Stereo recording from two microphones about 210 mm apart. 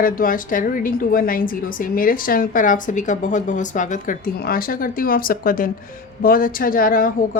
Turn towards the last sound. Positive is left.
turn(degrees=40)  # may be behind; listen again after turning